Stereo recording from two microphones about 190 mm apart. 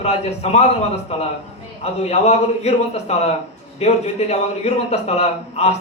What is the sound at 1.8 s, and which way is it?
A man's voice, 35° left (ahead or behind).